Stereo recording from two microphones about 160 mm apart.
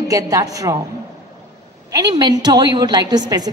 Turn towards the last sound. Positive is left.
turn(degrees=-25)  # may be behind; listen again after turning